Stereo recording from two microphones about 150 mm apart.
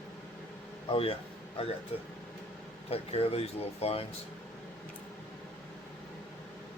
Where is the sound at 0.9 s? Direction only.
40° left (ahead or behind).